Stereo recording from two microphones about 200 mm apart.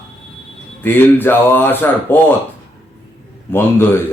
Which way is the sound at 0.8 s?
10° left (ahead or behind).